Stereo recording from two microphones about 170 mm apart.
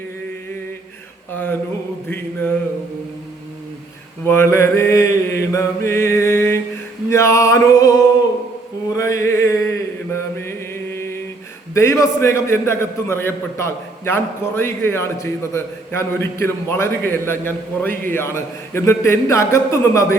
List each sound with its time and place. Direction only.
1.3 s a sound: 10° left (ahead or behind)
2.0 s mantra: 10° left (ahead or behind)
4.2 s mantra: 15° left (ahead or behind)
7.1 s male singing: 15° left (ahead or behind)
8.9 s mantra: 20° left (ahead or behind)
11.7 s a man's voice: 15° left (ahead or behind)